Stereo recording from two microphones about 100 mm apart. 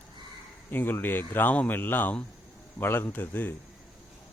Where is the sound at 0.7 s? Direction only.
20° left (ahead or behind).